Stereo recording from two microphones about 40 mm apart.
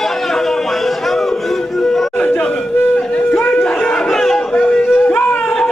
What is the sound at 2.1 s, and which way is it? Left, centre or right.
Music, left.